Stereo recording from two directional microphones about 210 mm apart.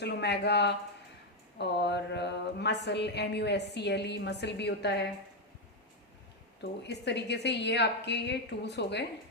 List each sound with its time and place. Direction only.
0.0 s speech: 50° left (ahead or behind)
6.6 s a woman's voice: 55° left (ahead or behind)